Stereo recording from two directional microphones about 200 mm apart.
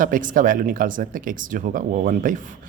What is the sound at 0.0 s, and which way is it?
Speech, 40° right (ahead or behind).